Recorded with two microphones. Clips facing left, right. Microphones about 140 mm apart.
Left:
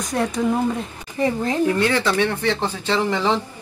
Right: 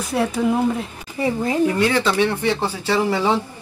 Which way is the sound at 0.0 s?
5° right (ahead or behind).